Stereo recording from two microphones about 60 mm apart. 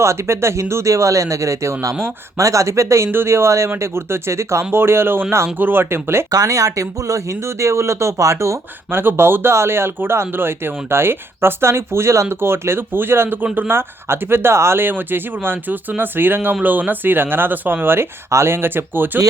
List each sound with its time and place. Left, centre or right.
0.0 s speech: right
6.3 s speech: right
8.9 s speech: right
18.3 s speech: right